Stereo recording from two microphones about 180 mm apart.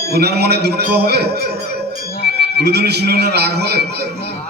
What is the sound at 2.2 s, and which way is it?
A man's voice, 65° right (ahead or behind).